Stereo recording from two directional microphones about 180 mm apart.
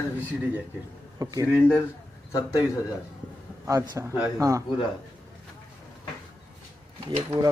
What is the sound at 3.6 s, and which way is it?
Speech, 20° right (ahead or behind).